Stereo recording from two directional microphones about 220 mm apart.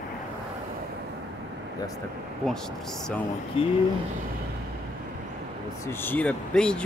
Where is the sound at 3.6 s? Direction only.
25° left (ahead or behind).